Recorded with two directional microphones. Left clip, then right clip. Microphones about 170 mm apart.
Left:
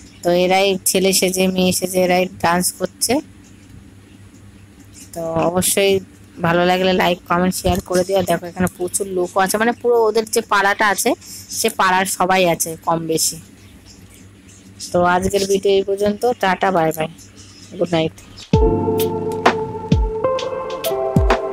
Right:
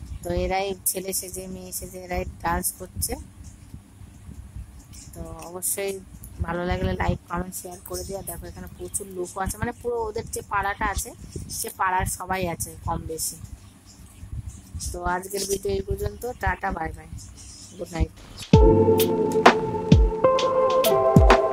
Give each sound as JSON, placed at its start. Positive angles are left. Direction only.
{"t": 0.2, "sound": "speech", "side_deg": 15}
{"t": 5.4, "sound": "speech", "side_deg": 15}
{"t": 15.0, "sound": "speech", "side_deg": 15}
{"t": 18.4, "sound": "music", "side_deg": 0}